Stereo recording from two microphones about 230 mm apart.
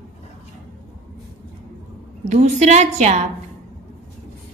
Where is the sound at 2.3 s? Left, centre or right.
Right.